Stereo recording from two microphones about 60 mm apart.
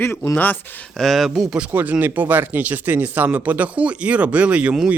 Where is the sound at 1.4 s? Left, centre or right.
Centre.